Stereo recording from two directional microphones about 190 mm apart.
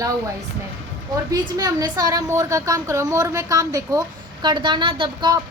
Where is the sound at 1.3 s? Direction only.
20° right (ahead or behind).